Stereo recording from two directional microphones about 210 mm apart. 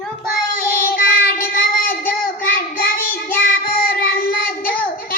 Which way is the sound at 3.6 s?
45° left (ahead or behind).